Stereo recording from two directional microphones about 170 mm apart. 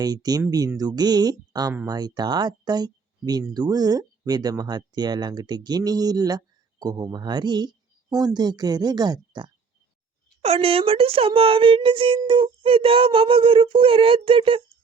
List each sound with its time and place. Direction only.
0.0 s speech: 25° right (ahead or behind)
10.4 s speech: 35° right (ahead or behind)